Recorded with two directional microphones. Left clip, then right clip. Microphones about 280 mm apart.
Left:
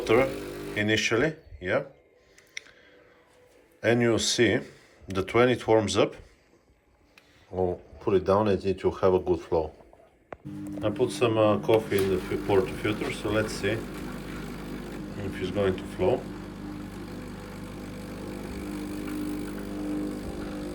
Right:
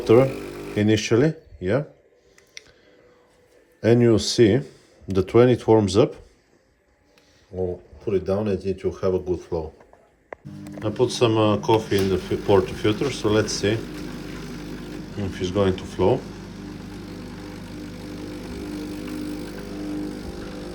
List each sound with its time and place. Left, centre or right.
0.0 s speech: right
0.3 s a sound: centre
0.8 s speech: right
2.6 s a sound: centre
3.8 s speech: centre
7.5 s speech: centre
10.8 s speech: centre
15.4 s speech: centre
18.3 s vehicle: centre